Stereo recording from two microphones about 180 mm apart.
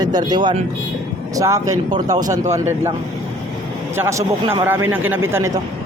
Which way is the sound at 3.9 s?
15° right (ahead or behind).